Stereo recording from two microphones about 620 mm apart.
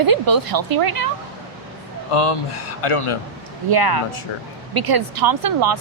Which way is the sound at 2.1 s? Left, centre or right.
Left.